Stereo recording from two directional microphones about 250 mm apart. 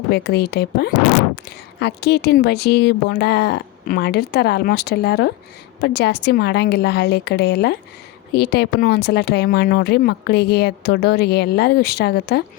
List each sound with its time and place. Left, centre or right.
0.1 s speech: left